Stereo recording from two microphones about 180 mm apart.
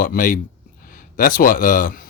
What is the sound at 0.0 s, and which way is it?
A man's voice, 50° left (ahead or behind).